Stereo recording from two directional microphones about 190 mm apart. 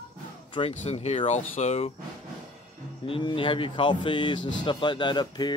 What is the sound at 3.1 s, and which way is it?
Speech, 25° left (ahead or behind).